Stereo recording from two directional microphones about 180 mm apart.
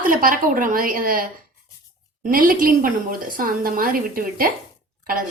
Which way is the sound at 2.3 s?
50° right (ahead or behind).